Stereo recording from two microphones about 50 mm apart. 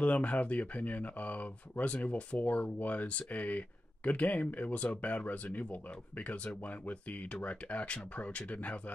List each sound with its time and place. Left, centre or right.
0.0 s speech: left